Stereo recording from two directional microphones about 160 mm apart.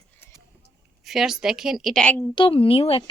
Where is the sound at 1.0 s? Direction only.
Centre (ahead or behind).